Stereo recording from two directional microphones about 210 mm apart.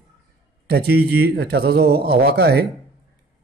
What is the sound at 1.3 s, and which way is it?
Speech, 50° right (ahead or behind).